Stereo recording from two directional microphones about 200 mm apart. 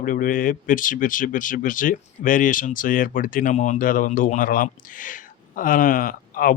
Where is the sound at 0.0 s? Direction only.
45° left (ahead or behind).